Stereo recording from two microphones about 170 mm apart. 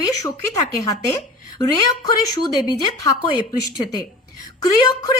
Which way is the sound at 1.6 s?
20° left (ahead or behind).